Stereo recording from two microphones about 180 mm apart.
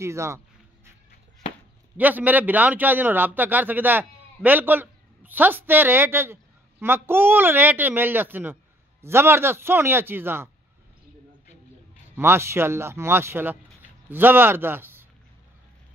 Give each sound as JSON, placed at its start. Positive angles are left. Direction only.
{"t": 0.0, "sound": "a man's voice", "side_deg": -15}
{"t": 2.0, "sound": "a man's voice", "side_deg": -10}
{"t": 12.2, "sound": "a man's voice", "side_deg": -15}